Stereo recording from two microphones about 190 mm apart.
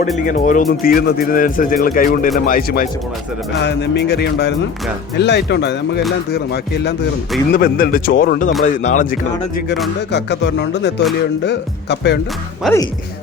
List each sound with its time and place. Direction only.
0.3 s speech: 45° left (ahead or behind)
3.6 s music: 65° left (ahead or behind)
7.5 s speech: 50° left (ahead or behind)
10.1 s music: 65° left (ahead or behind)
12.6 s speech: centre (ahead or behind)